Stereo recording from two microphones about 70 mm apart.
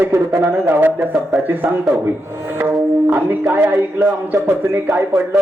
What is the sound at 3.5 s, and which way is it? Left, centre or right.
Speech, right.